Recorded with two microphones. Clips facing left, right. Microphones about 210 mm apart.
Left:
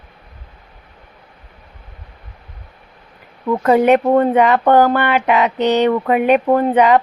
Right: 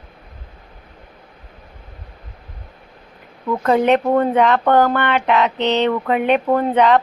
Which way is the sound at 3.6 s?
10° left (ahead or behind).